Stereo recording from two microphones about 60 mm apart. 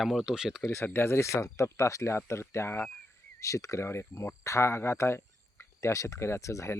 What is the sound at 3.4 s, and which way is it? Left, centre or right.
Speech, left.